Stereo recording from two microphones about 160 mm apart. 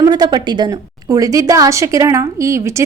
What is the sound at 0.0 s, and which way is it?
A woman's voice, 25° right (ahead or behind).